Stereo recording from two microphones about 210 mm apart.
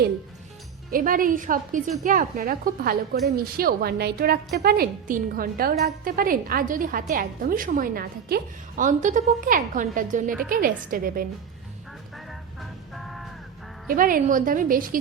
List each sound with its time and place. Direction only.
0.9 s a woman's voice: 40° right (ahead or behind)
12.1 s vehicle: centre (ahead or behind)
13.8 s a woman's voice: 40° right (ahead or behind)